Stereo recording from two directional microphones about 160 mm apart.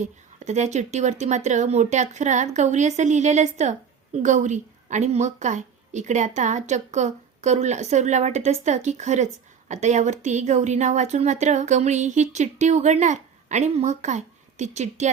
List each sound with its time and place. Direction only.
0.0 s speech: 45° right (ahead or behind)